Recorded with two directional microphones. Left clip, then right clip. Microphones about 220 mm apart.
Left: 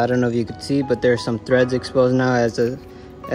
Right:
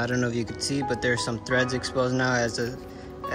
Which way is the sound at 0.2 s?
5° right (ahead or behind).